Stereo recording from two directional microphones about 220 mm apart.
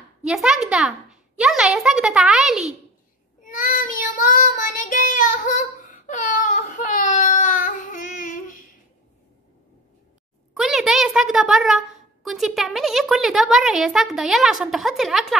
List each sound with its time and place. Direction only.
0.2 s a child's voice: 5° right (ahead or behind)
3.4 s child singing: 40° left (ahead or behind)
10.5 s a woman's voice: centre (ahead or behind)